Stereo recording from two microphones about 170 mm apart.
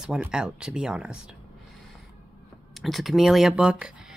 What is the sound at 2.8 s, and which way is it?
Speech, centre (ahead or behind).